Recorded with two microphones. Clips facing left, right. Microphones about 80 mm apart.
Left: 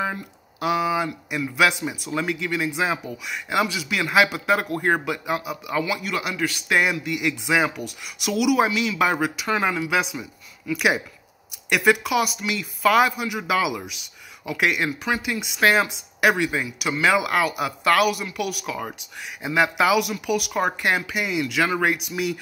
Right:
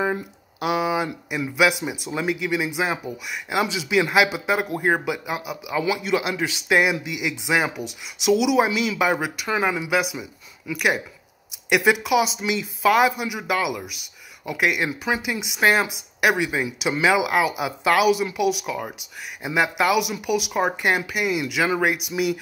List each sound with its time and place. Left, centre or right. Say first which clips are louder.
0.0 s speech: right 3 dB; centre
6.0 s speech: right 3 dB; right
7.8 s speech: right 1 dB; right
8.2 s speech: right 2 dB; centre
10.7 s a man's voice: left 1 dB; centre
11.7 s speech: right 1 dB; centre
12.8 s a man's voice: even; centre
16.6 s speech: right 2 dB; right
17.0 s speech: right 1 dB; centre
18.7 s a man's voice: right 1 dB; centre